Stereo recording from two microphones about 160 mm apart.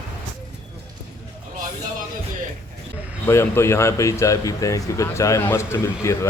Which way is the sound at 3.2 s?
15° left (ahead or behind).